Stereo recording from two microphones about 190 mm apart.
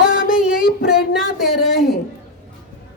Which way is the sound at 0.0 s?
5° right (ahead or behind).